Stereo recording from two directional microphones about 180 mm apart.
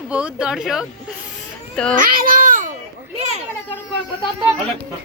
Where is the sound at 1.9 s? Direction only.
50° right (ahead or behind).